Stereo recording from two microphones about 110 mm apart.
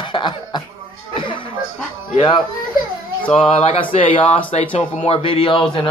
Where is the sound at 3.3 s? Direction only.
65° left (ahead or behind).